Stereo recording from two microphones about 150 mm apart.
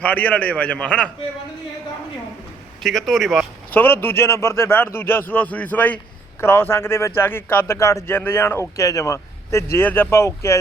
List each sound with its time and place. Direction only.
0.0 s a man's voice: 10° left (ahead or behind)
2.8 s speech: centre (ahead or behind)
3.7 s a man's voice: 15° left (ahead or behind)